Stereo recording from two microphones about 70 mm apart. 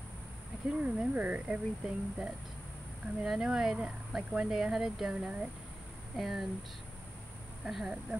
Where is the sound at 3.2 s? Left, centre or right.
Centre.